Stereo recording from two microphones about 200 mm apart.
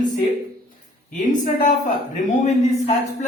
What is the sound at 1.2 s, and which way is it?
Speech, 40° left (ahead or behind).